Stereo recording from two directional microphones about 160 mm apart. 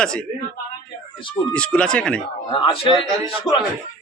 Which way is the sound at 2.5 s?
35° left (ahead or behind).